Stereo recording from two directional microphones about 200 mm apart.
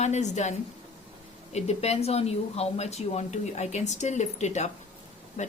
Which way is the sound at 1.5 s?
30° left (ahead or behind).